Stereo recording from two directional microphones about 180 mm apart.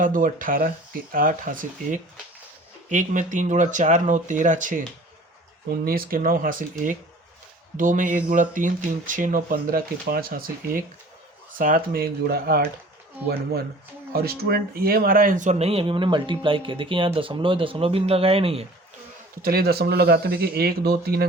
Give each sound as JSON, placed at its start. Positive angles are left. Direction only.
{"t": 0.0, "sound": "speech", "side_deg": -50}
{"t": 5.8, "sound": "speech", "side_deg": -55}
{"t": 19.4, "sound": "speech", "side_deg": -55}